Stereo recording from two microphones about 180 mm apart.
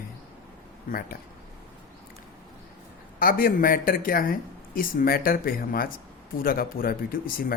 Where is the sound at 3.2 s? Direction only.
55° left (ahead or behind).